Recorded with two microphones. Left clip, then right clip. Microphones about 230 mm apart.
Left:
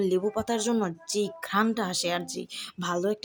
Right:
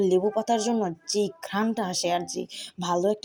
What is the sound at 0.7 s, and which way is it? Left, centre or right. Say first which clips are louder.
Speech: right 1 dB; centre.